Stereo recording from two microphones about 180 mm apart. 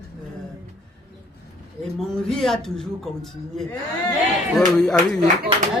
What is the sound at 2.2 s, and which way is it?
Speech, centre (ahead or behind).